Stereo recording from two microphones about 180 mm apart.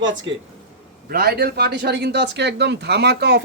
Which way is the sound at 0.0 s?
90° right.